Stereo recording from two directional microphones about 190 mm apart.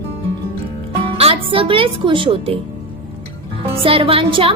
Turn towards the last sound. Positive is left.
turn(degrees=-30)  # may be behind; listen again after turning